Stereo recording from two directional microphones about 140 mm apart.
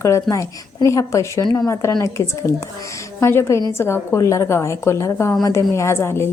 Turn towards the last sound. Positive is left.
turn(degrees=20)  # may be behind; listen again after turning